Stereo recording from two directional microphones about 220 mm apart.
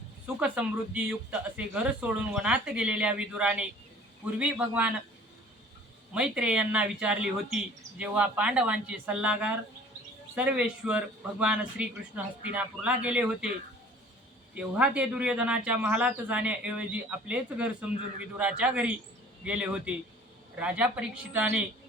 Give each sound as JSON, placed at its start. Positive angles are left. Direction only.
{"t": 0.3, "sound": "a man's voice", "side_deg": -5}
{"t": 6.1, "sound": "a man's voice", "side_deg": -5}
{"t": 14.5, "sound": "a man's voice", "side_deg": -5}